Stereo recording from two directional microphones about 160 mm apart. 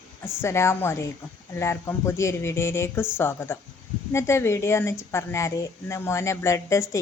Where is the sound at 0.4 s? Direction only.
15° left (ahead or behind).